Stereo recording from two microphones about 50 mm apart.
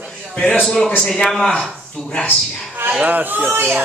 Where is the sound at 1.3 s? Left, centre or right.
Centre.